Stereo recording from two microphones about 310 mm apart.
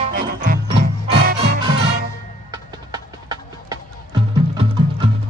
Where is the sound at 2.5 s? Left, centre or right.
Centre.